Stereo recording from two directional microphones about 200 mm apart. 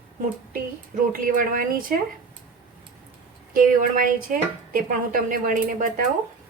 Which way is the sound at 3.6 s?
45° right (ahead or behind).